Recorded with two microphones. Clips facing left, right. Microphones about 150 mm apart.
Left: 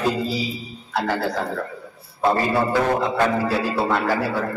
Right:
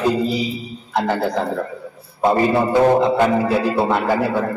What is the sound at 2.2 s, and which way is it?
A man's voice, 15° right (ahead or behind).